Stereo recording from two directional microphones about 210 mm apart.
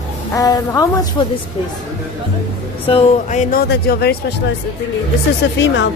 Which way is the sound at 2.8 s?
30° left (ahead or behind).